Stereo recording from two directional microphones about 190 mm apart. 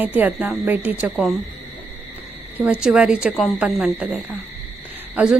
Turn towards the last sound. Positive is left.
turn(degrees=-5)  # may be behind; listen again after turning